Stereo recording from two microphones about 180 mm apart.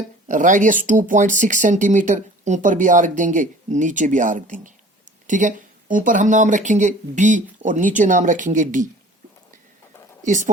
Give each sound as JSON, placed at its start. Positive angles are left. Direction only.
{"t": 0.3, "sound": "speech", "side_deg": -45}
{"t": 10.2, "sound": "speech", "side_deg": -45}